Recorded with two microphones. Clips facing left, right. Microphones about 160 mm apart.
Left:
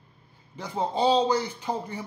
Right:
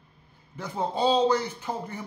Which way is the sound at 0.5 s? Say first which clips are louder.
Left 1 dB; 15° left (ahead or behind).